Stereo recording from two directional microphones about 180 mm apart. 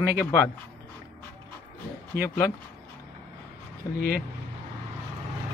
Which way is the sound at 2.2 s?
15° left (ahead or behind).